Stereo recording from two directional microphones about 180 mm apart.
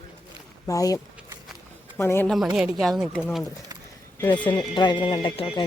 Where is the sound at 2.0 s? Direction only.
15° left (ahead or behind).